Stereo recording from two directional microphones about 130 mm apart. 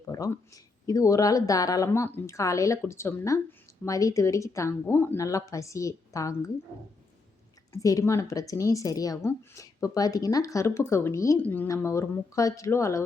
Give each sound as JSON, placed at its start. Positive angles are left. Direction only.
{"t": 0.1, "sound": "speech", "side_deg": 25}
{"t": 7.7, "sound": "a woman's voice", "side_deg": 25}